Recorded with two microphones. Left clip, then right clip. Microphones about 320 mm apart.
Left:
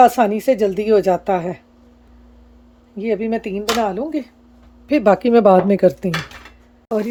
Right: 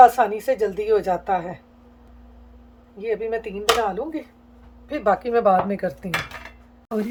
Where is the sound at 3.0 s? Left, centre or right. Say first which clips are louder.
Left 4 dB; left.